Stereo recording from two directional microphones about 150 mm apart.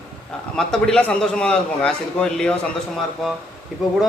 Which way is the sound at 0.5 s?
5° left (ahead or behind).